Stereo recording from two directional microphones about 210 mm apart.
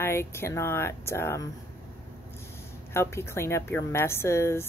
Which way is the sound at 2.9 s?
10° left (ahead or behind).